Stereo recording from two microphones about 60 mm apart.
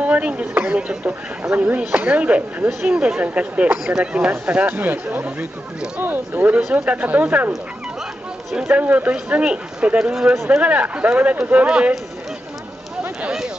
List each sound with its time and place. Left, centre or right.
0.0 s speech: right
8.5 s speech: right
11.6 s speech: centre